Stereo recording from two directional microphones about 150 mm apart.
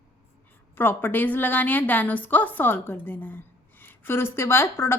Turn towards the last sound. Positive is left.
turn(degrees=15)  # may be behind; listen again after turning